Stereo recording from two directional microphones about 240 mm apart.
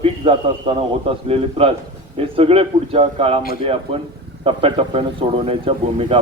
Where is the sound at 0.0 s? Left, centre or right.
Right.